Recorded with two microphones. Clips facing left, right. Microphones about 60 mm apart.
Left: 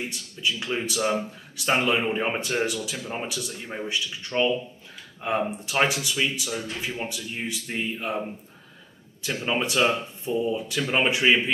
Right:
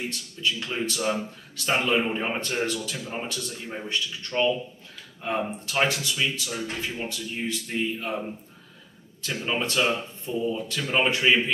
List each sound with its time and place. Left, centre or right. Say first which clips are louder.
0.4 s speech: left 1 dB; centre
9.2 s speech: left 2 dB; centre